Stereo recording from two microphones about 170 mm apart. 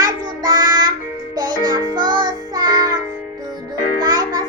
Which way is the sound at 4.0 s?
25° right (ahead or behind).